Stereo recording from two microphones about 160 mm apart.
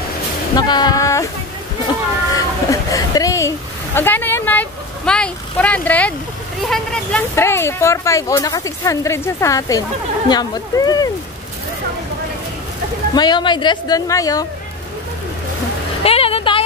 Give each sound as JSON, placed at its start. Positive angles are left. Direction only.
{"t": 0.6, "sound": "speech", "side_deg": 25}
{"t": 2.3, "sound": "a woman's voice", "side_deg": 20}
{"t": 7.3, "sound": "speech", "side_deg": 15}
{"t": 13.1, "sound": "speech", "side_deg": 25}
{"t": 16.0, "sound": "vehicle", "side_deg": 35}